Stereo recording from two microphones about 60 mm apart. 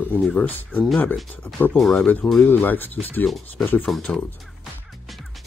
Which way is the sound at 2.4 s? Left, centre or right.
Left.